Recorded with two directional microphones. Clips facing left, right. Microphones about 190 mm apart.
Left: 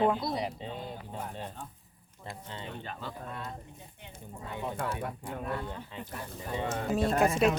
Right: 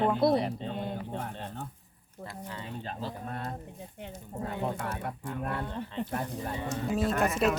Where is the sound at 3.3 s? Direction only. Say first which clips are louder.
Right 3 dB; 50° right (ahead or behind).